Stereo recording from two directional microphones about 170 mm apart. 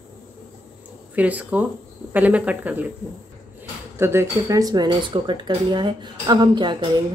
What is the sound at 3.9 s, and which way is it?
Speech, 15° right (ahead or behind).